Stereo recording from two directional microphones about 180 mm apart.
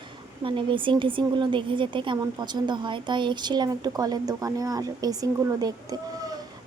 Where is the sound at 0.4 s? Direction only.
30° right (ahead or behind).